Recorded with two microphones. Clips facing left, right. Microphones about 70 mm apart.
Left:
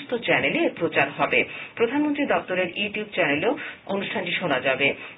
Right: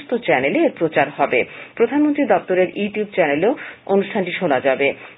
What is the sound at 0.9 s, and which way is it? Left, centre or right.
Speech, right.